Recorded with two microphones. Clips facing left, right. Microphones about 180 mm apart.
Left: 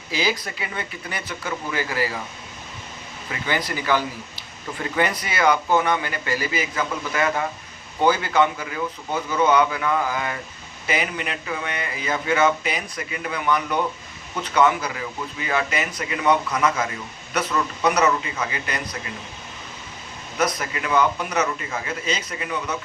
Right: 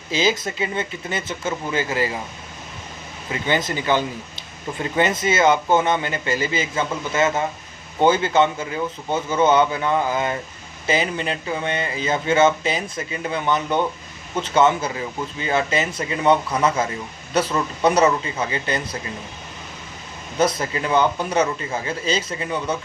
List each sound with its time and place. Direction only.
0.1 s speech: 20° right (ahead or behind)
3.4 s speech: 25° right (ahead or behind)
20.4 s speech: 30° right (ahead or behind)